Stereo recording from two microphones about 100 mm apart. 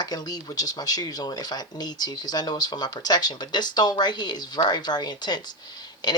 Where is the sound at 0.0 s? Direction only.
40° left (ahead or behind).